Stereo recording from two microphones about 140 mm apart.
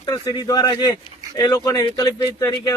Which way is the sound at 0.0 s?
30° left (ahead or behind).